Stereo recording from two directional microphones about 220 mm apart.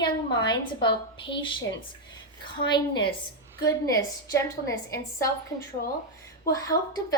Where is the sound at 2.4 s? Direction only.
20° left (ahead or behind).